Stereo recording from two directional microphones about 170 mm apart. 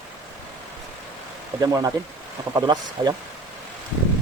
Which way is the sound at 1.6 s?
20° right (ahead or behind).